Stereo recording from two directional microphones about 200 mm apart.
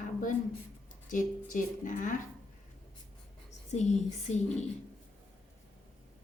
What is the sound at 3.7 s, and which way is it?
Speech, 35° left (ahead or behind).